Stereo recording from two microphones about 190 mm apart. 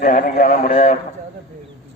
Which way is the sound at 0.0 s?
40° left (ahead or behind).